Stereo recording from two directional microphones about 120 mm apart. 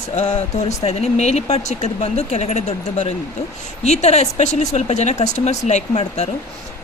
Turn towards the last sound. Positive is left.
turn(degrees=65)  # may be behind; listen again after turning